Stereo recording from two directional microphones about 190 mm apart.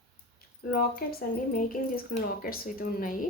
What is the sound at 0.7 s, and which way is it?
Speech, 50° left (ahead or behind).